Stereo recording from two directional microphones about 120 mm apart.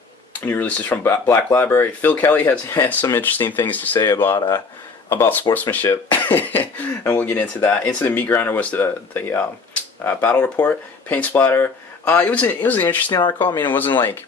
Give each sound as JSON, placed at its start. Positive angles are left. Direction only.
{"t": 0.4, "sound": "speech", "side_deg": 15}
{"t": 3.9, "sound": "speech", "side_deg": 30}
{"t": 5.0, "sound": "speech", "side_deg": 20}
{"t": 13.1, "sound": "speech", "side_deg": 40}
{"t": 13.7, "sound": "speech", "side_deg": 15}